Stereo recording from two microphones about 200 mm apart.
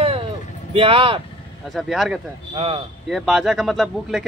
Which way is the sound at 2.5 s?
30° right (ahead or behind).